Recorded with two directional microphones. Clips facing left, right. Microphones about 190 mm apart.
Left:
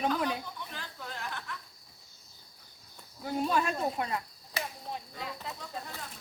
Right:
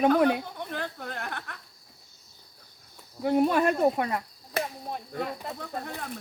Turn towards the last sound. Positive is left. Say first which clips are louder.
# right 7 dB
turn(degrees=-60)  # may be behind; listen again after turning